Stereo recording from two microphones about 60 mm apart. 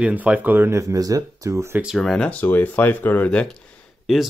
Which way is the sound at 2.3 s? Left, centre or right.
Left.